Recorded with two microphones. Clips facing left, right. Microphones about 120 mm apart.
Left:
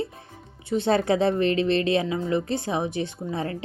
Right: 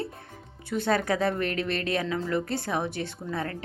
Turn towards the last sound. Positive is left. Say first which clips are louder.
# left 3 dB
turn(degrees=20)  # may be behind; listen again after turning